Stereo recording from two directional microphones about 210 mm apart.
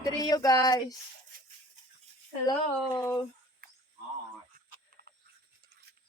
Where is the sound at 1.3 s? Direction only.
40° right (ahead or behind).